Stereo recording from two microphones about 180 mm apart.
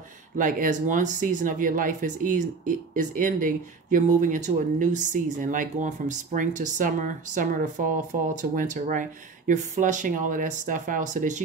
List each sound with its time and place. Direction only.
0.4 s speech: 45° right (ahead or behind)